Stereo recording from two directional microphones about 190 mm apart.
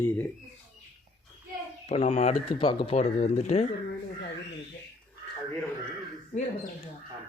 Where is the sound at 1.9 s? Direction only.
35° left (ahead or behind).